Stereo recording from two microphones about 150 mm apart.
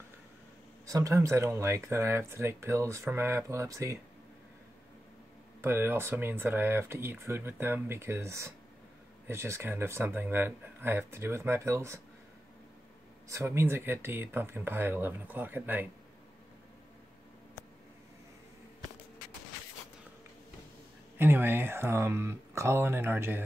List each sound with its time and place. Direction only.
0.8 s speech: 20° right (ahead or behind)
5.6 s speech: 15° right (ahead or behind)
13.3 s speech: 15° right (ahead or behind)
21.2 s speech: 15° right (ahead or behind)